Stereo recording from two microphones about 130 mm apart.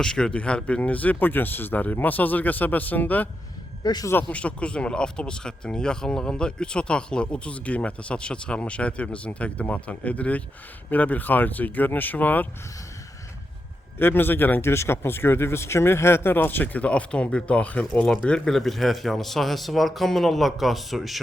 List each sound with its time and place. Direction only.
0.0 s speech: 5° left (ahead or behind)
3.8 s speech: 30° left (ahead or behind)
4.1 s speech: 15° left (ahead or behind)
14.0 s speech: 15° left (ahead or behind); by 21.2 s centre (ahead or behind)